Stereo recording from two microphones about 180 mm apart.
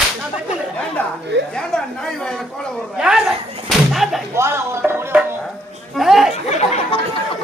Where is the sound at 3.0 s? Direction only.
5° right (ahead or behind).